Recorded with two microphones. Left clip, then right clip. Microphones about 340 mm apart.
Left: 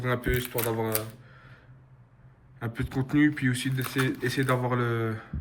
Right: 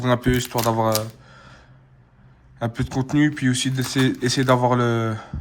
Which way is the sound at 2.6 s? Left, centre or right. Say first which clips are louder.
Right 7 dB; centre.